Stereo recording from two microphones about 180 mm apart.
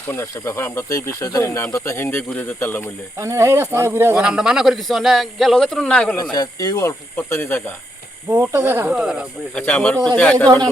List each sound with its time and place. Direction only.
0.1 s speech: 15° left (ahead or behind)
3.2 s speech: 15° right (ahead or behind); by 6.1 s 5° left (ahead or behind)
6.3 s speech: 20° left (ahead or behind)
8.3 s speech: 15° right (ahead or behind)
9.6 s speech: 5° left (ahead or behind)